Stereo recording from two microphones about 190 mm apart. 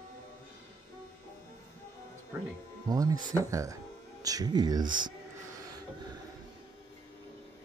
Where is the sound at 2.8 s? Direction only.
20° right (ahead or behind).